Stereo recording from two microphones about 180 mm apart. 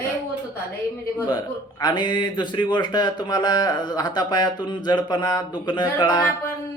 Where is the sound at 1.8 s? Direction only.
25° left (ahead or behind).